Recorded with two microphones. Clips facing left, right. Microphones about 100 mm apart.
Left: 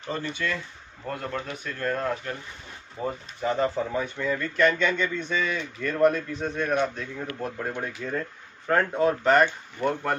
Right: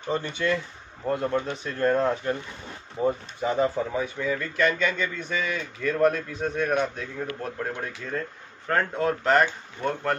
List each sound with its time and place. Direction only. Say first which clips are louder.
0.1 s speech: right 4 dB; 15° right (ahead or behind)
3.0 s speech: right 5 dB; 10° right (ahead or behind)
9.8 s speech: left 1 dB; 15° left (ahead or behind)